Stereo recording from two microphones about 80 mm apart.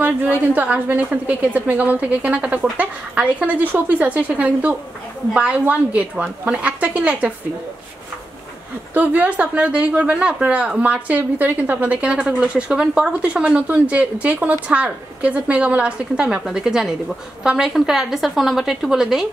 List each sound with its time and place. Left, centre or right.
0.0 s a woman's voice: right
8.9 s a woman's voice: centre